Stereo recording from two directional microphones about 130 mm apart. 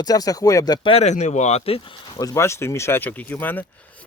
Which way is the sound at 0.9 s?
60° left (ahead or behind).